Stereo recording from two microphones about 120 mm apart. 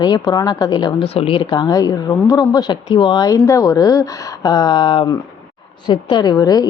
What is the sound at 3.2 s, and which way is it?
A woman's voice, 30° left (ahead or behind).